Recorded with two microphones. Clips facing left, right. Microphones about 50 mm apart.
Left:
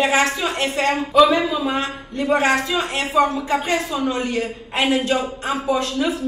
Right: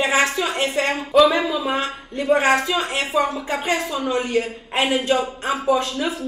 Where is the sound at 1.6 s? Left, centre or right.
Centre.